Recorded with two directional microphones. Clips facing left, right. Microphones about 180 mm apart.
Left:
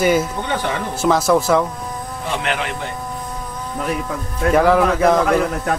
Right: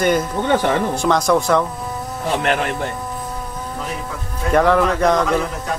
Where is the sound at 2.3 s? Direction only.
45° right (ahead or behind).